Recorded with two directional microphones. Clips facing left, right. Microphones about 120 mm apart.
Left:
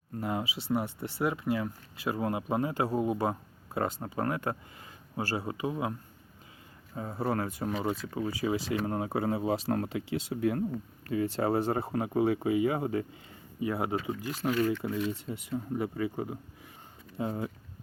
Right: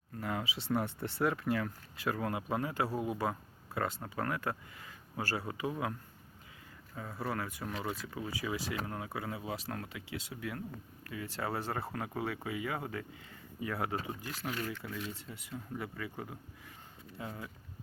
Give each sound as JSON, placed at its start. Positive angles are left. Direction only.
{"t": 0.2, "sound": "speech", "side_deg": 20}
{"t": 0.5, "sound": "speech", "side_deg": 10}
{"t": 6.9, "sound": "speech", "side_deg": 30}
{"t": 15.5, "sound": "speech", "side_deg": 30}